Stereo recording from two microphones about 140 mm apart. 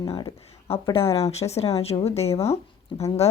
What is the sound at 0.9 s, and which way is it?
A woman's voice, 45° left (ahead or behind).